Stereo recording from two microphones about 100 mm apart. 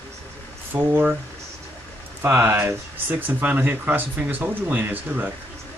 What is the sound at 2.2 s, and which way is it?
Speech, 25° right (ahead or behind).